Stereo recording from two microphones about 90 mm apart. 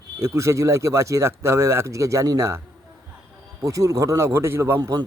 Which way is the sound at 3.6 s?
35° right (ahead or behind).